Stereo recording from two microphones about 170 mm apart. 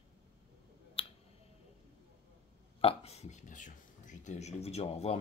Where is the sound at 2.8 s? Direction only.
35° left (ahead or behind).